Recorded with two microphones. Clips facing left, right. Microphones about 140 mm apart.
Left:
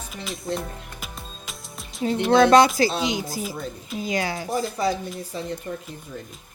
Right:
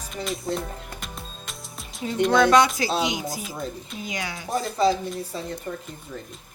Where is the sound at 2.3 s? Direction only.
35° left (ahead or behind).